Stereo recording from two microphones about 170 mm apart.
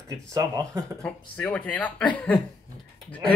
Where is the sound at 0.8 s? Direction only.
5° left (ahead or behind).